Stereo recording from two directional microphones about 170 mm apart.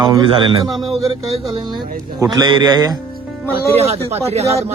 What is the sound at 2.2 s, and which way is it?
Speech, 25° right (ahead or behind).